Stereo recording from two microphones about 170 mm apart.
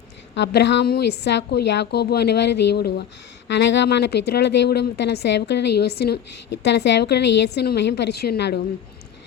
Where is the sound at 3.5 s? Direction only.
90° left; by 6.1 s 70° left (ahead or behind).